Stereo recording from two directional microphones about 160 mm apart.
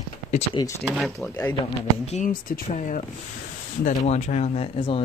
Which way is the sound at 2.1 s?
55° left (ahead or behind).